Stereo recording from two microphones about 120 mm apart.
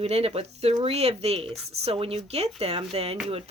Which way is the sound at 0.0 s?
55° right (ahead or behind).